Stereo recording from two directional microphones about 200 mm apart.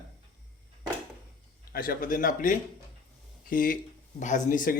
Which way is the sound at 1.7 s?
45° left (ahead or behind).